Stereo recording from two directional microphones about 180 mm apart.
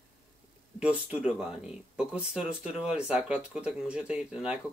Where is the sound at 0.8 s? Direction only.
5° right (ahead or behind).